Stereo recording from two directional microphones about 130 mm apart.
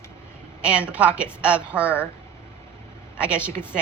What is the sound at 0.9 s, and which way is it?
A woman's voice, 10° right (ahead or behind).